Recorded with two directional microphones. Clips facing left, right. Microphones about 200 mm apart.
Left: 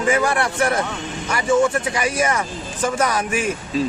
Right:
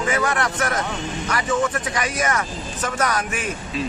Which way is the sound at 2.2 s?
30° left (ahead or behind).